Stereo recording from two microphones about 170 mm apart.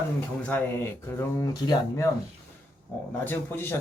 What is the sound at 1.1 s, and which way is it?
Speech, 15° left (ahead or behind).